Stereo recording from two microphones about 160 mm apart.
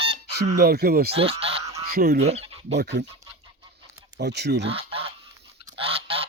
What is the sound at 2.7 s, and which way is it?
Speech, 90° right.